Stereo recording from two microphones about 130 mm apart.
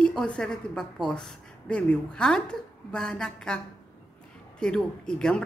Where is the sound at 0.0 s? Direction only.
10° left (ahead or behind).